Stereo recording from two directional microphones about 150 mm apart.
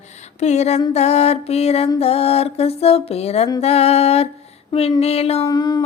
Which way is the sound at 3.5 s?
45° left (ahead or behind).